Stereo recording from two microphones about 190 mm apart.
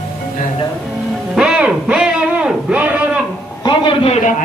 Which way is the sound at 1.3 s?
5° right (ahead or behind).